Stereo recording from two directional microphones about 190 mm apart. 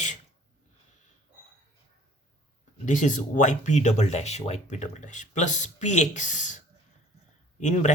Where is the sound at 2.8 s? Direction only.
40° left (ahead or behind).